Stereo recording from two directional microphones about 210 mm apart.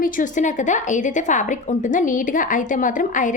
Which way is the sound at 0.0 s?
40° left (ahead or behind).